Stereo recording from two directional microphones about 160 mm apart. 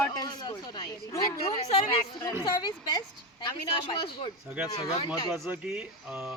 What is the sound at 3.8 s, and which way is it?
A woman's voice, 30° left (ahead or behind).